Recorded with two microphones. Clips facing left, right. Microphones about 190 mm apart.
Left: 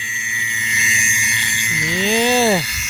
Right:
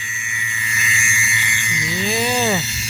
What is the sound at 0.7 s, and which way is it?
Vehicle, 20° left (ahead or behind).